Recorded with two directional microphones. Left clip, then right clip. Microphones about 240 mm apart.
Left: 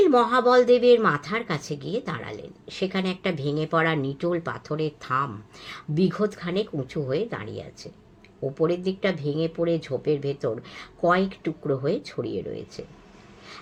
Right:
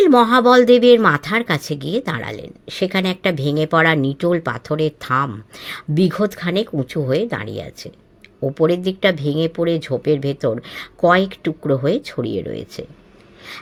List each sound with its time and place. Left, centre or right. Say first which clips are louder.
0.0 s speech: right 7 dB; right